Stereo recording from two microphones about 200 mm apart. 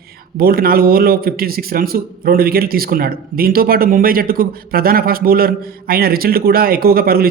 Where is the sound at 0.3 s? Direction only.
45° right (ahead or behind).